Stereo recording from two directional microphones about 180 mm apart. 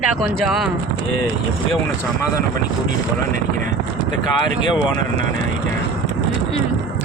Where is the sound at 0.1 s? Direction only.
Centre (ahead or behind).